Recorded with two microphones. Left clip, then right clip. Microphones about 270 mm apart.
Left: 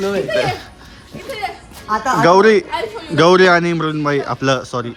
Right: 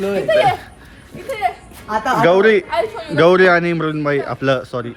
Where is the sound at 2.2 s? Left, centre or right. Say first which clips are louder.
Left 2 dB; centre.